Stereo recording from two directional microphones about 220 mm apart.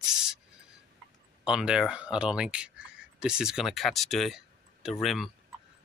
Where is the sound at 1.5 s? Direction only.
5° right (ahead or behind).